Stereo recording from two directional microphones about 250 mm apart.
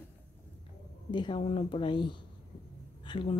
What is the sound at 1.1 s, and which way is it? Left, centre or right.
Speech, centre.